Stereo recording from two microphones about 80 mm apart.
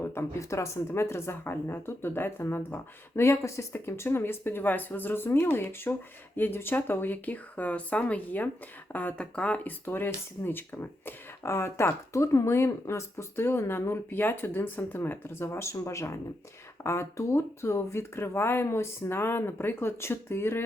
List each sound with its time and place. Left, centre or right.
0.1 s a woman's voice: left; by 9.7 s centre
9.8 s a woman's voice: left